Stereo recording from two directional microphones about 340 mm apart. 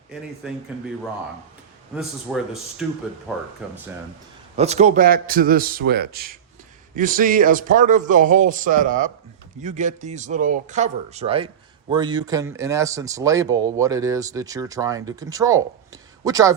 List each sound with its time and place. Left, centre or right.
0.7 s speech: centre
2.0 s speech: centre
4.5 s a man's voice: centre